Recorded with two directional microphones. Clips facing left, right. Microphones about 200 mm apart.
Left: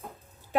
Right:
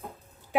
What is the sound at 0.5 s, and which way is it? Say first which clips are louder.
Speech: right 1 dB; 15° right (ahead or behind).